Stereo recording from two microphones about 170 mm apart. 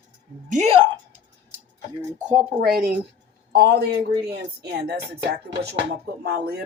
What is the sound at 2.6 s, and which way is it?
Speech, 60° right (ahead or behind).